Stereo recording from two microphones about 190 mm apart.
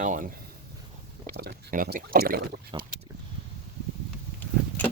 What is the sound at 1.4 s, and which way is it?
Speech, 55° right (ahead or behind).